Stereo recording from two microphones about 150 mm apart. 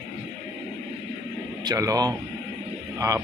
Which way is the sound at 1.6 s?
25° right (ahead or behind).